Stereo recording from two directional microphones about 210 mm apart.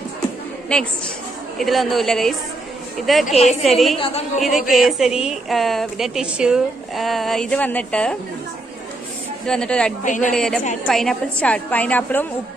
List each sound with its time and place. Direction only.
0.7 s a woman's voice: 5° left (ahead or behind)
3.9 s a woman's voice: 25° left (ahead or behind)
4.4 s a woman's voice: centre (ahead or behind)
9.5 s a woman's voice: 5° left (ahead or behind)
10.0 s a woman's voice: 35° left (ahead or behind)
10.3 s a woman's voice: centre (ahead or behind)